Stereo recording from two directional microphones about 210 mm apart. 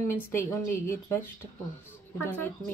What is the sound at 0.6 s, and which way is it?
Speech, 40° left (ahead or behind).